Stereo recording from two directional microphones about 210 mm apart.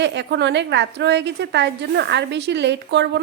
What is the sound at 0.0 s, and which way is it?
A woman's voice, 55° right (ahead or behind).